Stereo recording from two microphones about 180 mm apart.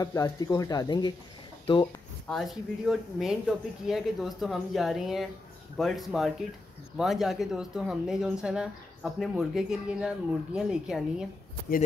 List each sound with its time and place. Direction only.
0.0 s speech: 20° left (ahead or behind)
2.2 s speech: centre (ahead or behind)